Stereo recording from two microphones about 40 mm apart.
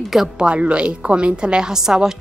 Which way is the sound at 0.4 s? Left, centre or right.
Right.